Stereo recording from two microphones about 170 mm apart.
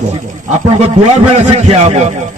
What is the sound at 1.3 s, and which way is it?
Speech, 45° right (ahead or behind).